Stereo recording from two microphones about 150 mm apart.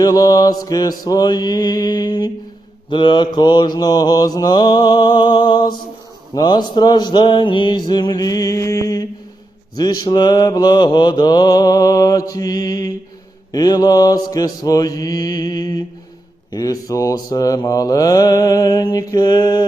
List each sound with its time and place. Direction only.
0.0 s mantra: 25° left (ahead or behind)